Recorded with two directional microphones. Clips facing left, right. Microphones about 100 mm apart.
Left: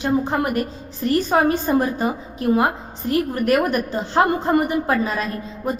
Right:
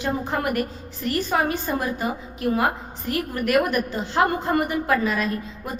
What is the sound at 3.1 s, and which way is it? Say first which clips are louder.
A woman's voice: left 3 dB; 30° left (ahead or behind).